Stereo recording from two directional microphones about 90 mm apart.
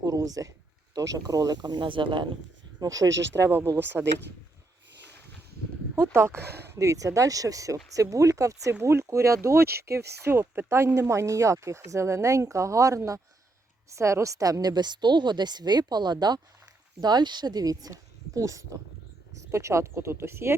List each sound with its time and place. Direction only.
0.0 s a woman's voice: 40° right (ahead or behind); by 2.2 s 65° right (ahead or behind)
2.8 s speech: 40° right (ahead or behind); by 4.0 s 25° right (ahead or behind)
6.0 s a woman's voice: 30° right (ahead or behind)